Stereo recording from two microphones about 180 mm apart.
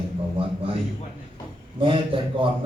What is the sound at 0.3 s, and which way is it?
Speech, 30° right (ahead or behind).